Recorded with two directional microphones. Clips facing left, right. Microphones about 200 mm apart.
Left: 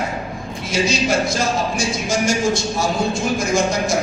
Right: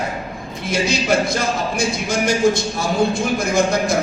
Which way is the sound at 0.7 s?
55° right (ahead or behind).